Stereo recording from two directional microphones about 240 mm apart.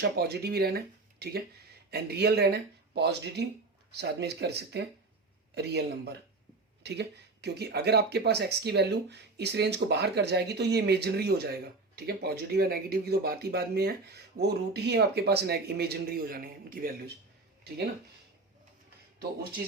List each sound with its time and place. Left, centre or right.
0.0 s speech: right